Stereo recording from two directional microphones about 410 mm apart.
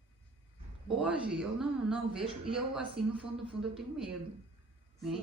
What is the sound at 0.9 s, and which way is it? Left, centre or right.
A woman's voice, centre.